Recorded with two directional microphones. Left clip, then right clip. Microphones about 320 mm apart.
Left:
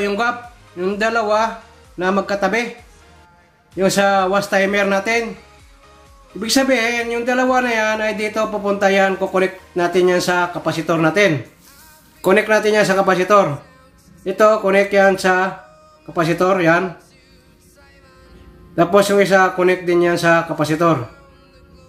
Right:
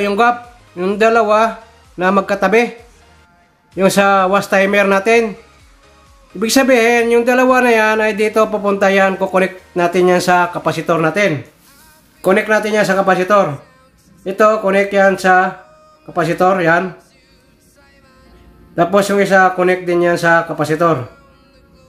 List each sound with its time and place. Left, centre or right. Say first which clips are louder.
0.0 s speech: right 6 dB; centre
3.7 s speech: right 4 dB; centre
6.4 s speech: right 5 dB; right
18.8 s speech: even; centre